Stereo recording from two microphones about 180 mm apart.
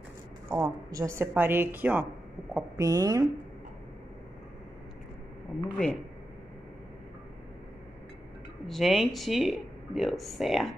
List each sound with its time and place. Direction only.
0.5 s a woman's voice: 15° right (ahead or behind)
5.8 s speech: 5° left (ahead or behind)
8.6 s speech: centre (ahead or behind)